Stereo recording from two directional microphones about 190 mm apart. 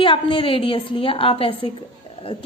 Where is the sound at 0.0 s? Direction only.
25° left (ahead or behind).